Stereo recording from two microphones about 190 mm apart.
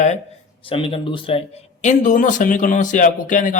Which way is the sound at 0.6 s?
30° left (ahead or behind).